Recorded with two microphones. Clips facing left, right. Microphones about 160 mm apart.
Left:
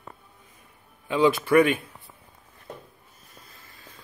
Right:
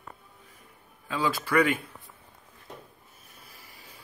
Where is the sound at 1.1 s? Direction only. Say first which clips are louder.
Left 8 dB; 20° left (ahead or behind).